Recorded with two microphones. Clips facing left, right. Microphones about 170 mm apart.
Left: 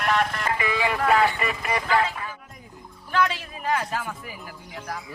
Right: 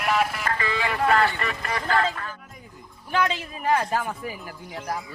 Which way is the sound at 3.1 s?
15° right (ahead or behind).